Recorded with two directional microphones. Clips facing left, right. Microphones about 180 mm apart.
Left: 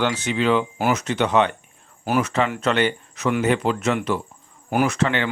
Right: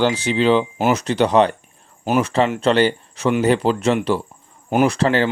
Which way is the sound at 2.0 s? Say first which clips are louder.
Right 3 dB; 20° right (ahead or behind).